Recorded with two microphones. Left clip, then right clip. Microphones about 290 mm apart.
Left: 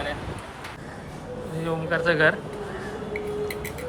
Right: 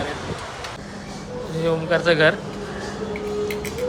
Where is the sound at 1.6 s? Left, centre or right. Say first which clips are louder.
Right 5 dB; centre.